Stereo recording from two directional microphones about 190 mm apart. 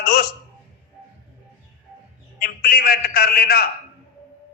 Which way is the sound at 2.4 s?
55° left (ahead or behind).